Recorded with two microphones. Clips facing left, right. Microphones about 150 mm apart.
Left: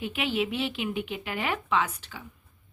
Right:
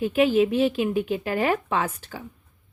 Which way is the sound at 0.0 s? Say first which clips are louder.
Right 10 dB; 40° right (ahead or behind).